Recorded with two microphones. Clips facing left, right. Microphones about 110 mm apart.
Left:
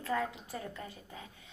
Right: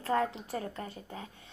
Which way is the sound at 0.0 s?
35° right (ahead or behind).